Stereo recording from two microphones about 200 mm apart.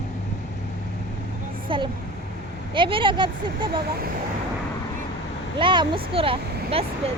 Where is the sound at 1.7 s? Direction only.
25° right (ahead or behind).